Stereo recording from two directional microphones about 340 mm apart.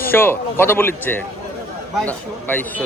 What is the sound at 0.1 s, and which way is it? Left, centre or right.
A man's voice, centre.